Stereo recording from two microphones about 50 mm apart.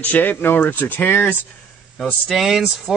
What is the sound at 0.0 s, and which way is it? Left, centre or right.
Speech, left.